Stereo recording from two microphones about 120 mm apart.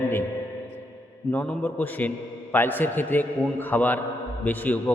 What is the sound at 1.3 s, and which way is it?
A man's voice, 15° left (ahead or behind).